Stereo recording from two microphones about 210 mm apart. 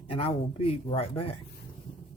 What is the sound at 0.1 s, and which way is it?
Speech, 25° left (ahead or behind).